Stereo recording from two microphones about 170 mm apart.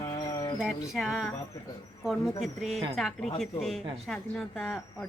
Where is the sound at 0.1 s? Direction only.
20° left (ahead or behind).